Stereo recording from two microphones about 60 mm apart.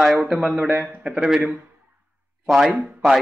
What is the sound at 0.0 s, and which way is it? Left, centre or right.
Speech, centre.